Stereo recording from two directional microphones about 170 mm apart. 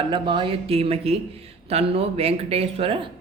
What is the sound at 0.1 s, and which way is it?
Speech, 30° right (ahead or behind).